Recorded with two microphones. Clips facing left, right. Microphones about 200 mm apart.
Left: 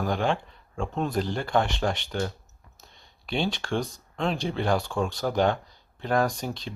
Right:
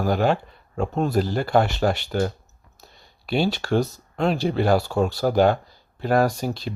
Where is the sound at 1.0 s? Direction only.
5° right (ahead or behind).